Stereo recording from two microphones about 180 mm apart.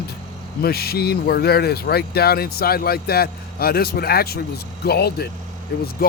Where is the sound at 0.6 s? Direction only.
60° left (ahead or behind).